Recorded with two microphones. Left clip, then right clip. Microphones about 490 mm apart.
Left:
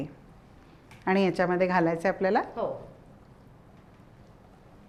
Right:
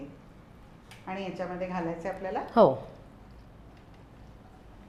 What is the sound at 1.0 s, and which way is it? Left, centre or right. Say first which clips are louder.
A woman's voice: left 11 dB; left.